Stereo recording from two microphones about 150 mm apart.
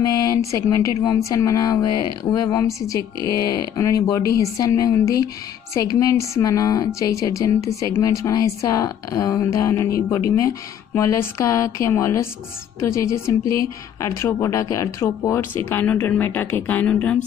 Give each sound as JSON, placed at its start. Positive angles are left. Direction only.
{"t": 0.0, "sound": "a woman's voice", "side_deg": 25}